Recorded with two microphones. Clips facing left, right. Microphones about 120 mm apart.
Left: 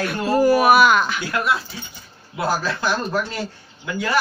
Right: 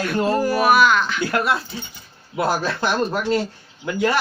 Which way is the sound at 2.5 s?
25° right (ahead or behind).